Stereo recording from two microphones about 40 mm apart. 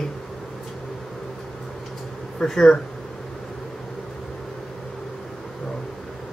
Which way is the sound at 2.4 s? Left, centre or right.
Centre.